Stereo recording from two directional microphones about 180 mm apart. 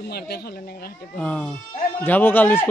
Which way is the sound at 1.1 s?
5° left (ahead or behind).